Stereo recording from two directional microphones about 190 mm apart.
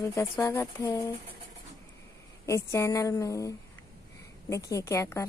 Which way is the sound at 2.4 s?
15° left (ahead or behind).